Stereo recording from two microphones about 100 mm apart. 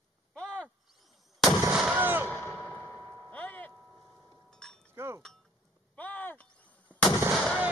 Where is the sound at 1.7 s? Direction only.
5° right (ahead or behind).